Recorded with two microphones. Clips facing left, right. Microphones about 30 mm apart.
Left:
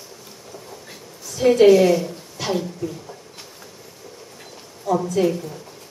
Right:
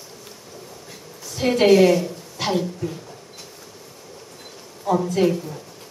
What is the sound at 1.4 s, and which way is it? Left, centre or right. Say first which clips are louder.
Speech: left 2 dB; centre.